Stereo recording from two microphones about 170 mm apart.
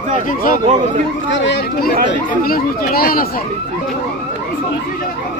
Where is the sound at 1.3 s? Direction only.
75° left (ahead or behind).